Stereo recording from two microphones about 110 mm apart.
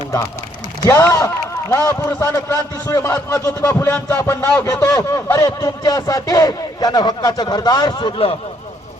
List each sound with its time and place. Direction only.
0.9 s a man's voice: 30° left (ahead or behind); by 8.4 s 55° left (ahead or behind)